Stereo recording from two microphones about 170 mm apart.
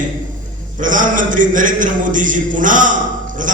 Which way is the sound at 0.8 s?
50° right (ahead or behind).